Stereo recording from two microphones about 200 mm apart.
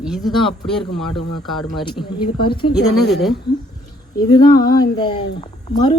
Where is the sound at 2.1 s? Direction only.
25° left (ahead or behind).